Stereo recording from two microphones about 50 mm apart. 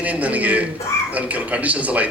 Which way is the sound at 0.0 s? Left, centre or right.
Right.